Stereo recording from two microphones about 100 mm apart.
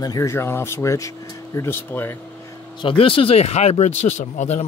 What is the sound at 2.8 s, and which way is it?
Speech, 60° left (ahead or behind).